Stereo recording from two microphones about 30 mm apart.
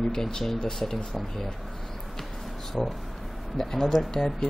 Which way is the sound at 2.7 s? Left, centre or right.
Centre.